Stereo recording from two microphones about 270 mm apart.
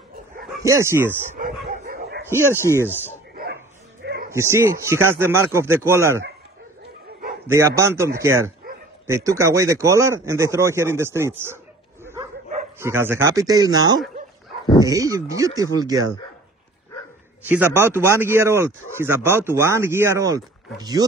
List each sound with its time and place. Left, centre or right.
0.6 s speech: centre
1.7 s dog: right
2.5 s speech: centre
4.0 s a sound: right
4.3 s speech: centre
7.4 s speech: centre
17.5 s speech: centre